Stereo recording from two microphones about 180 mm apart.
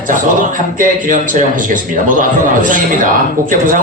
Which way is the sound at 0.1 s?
45° right (ahead or behind).